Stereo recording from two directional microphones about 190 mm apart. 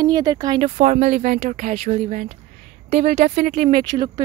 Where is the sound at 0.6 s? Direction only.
40° right (ahead or behind).